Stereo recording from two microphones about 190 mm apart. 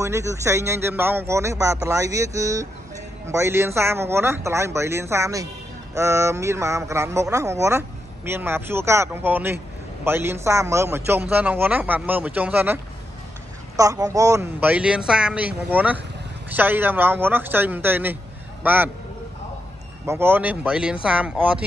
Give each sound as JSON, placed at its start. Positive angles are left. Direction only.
{"t": 0.0, "sound": "a man's voice", "side_deg": -15}
{"t": 20.1, "sound": "a man's voice", "side_deg": -10}